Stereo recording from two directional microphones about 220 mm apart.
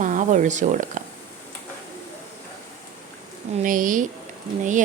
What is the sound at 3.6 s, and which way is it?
Speech, 35° right (ahead or behind).